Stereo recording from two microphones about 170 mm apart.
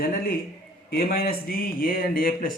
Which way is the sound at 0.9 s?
60° left (ahead or behind).